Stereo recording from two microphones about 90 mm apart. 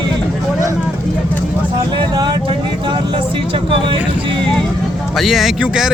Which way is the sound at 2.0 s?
55° right (ahead or behind).